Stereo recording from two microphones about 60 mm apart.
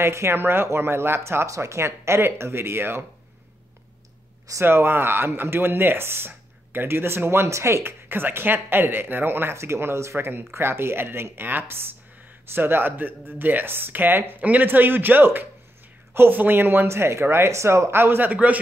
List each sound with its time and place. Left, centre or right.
0.0 s speech: right
4.6 s speech: right
8.1 s speech: right